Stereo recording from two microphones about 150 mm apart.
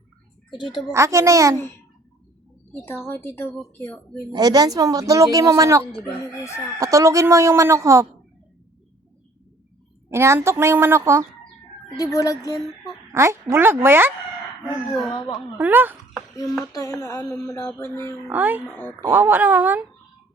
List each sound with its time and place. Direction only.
0.5 s a woman's voice: 30° left (ahead or behind)
0.9 s a woman's voice: 20° right (ahead or behind)
2.8 s a woman's voice: 15° left (ahead or behind)
4.3 s a woman's voice: 25° right (ahead or behind)
10.1 s a woman's voice: 20° right (ahead or behind)
11.9 s a sound: 20° left (ahead or behind)
12.5 s speech: centre (ahead or behind)
13.1 s a woman's voice: 20° right (ahead or behind)
15.5 s a woman's voice: 10° right (ahead or behind)
16.3 s a sound: 25° left (ahead or behind)
18.3 s a woman's voice: 10° right (ahead or behind)
18.6 s a woman's voice: 15° left (ahead or behind)
19.1 s a woman's voice: 15° right (ahead or behind)